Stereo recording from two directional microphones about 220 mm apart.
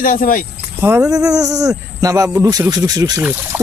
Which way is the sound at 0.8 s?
15° right (ahead or behind).